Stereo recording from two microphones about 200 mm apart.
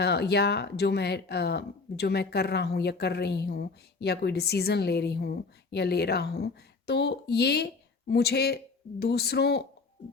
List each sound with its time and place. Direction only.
0.0 s speech: 55° left (ahead or behind)